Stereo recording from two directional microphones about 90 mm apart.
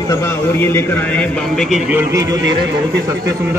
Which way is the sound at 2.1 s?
40° right (ahead or behind).